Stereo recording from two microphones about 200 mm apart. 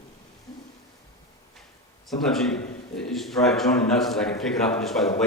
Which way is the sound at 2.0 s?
Centre (ahead or behind).